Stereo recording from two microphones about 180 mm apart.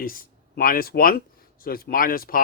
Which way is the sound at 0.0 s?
50° left (ahead or behind).